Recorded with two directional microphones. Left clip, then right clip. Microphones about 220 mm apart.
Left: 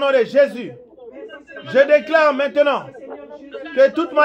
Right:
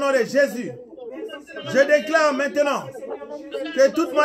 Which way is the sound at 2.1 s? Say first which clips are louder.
Left 4 dB; 10° right (ahead or behind).